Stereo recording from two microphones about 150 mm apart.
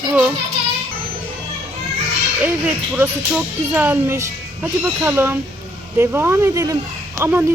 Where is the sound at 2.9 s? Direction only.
10° right (ahead or behind).